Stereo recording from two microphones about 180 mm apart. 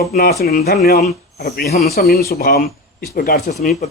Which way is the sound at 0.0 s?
60° left (ahead or behind).